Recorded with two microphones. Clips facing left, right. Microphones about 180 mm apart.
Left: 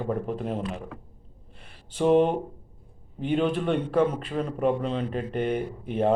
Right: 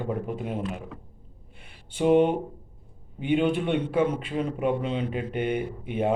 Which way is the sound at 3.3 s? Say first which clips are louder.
Right 1 dB; 10° right (ahead or behind).